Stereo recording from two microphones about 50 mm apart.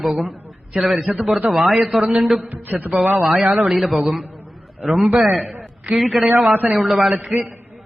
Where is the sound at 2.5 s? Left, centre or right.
Right.